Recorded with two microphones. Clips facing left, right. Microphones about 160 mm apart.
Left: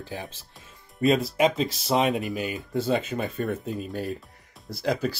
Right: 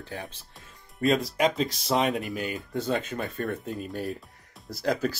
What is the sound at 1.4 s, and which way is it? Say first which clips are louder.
Speech: left 2 dB; 5° left (ahead or behind).